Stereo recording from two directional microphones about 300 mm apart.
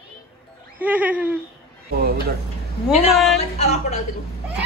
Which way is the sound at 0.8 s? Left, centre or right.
Centre.